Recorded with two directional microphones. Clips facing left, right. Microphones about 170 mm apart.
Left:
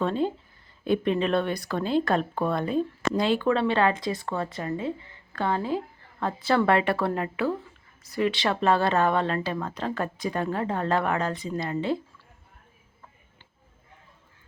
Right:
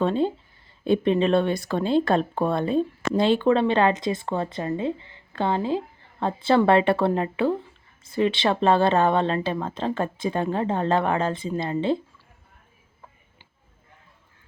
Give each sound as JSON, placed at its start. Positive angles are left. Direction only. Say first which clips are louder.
{"t": 0.0, "sound": "speech", "louder": "right 3 dB", "side_deg": -25}